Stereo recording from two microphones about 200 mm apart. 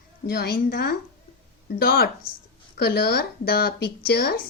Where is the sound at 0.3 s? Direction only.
55° left (ahead or behind).